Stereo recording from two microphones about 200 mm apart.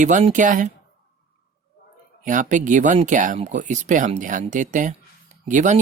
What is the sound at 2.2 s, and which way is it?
Speech, 40° right (ahead or behind).